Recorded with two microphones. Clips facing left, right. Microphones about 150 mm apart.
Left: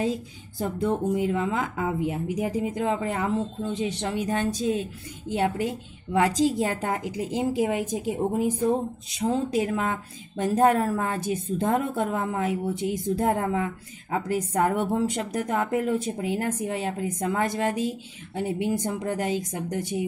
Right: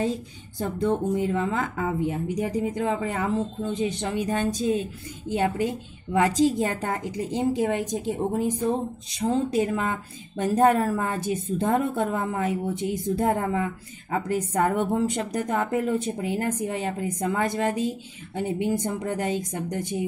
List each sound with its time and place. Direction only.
0.0 s a woman's voice: 5° left (ahead or behind)